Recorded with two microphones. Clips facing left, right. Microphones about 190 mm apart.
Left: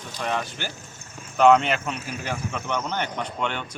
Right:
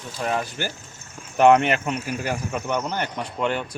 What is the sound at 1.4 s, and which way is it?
Speech, 15° right (ahead or behind).